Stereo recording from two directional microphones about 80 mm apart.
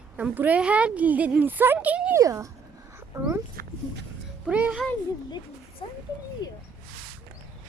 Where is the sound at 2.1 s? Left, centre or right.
Right.